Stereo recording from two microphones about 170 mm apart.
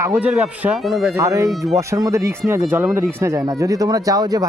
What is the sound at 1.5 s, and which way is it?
Speech, centre (ahead or behind).